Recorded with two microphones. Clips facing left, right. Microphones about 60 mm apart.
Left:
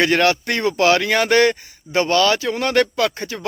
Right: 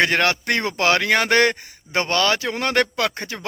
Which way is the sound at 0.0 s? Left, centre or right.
Right.